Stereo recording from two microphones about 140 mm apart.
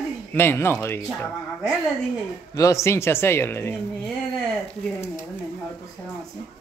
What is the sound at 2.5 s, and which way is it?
Speech, 20° left (ahead or behind).